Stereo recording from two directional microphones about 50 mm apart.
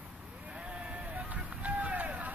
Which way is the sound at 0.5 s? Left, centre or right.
Right.